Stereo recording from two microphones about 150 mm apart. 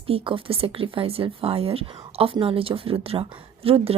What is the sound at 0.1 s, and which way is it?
Speech, 35° right (ahead or behind).